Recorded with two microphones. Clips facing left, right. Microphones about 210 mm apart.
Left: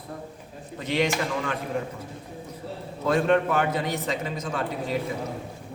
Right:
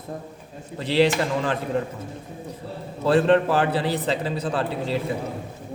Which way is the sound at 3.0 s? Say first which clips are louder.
Right 4 dB; 30° right (ahead or behind).